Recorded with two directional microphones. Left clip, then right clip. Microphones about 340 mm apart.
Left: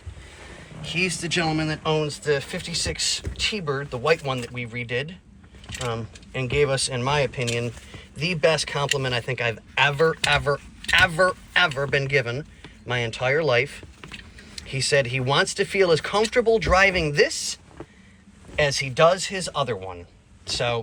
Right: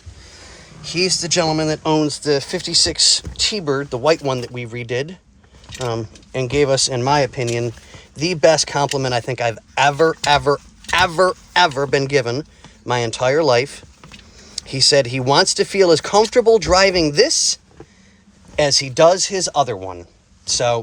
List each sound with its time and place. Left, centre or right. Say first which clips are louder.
0.8 s speech: right 6 dB; centre